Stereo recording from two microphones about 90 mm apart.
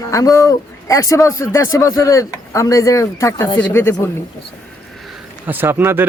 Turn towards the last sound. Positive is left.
turn(degrees=-25)  # may be behind; listen again after turning